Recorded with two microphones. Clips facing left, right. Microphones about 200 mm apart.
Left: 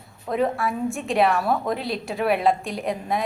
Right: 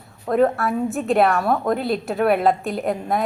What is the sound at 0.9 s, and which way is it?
A woman's voice, centre (ahead or behind).